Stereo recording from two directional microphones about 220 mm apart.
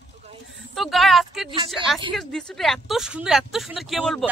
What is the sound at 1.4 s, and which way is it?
Speech, 20° right (ahead or behind).